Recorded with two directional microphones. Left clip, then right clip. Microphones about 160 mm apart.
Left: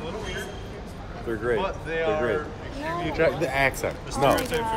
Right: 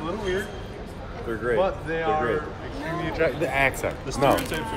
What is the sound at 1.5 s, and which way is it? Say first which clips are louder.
Speech: right 3 dB; 30° left (ahead or behind).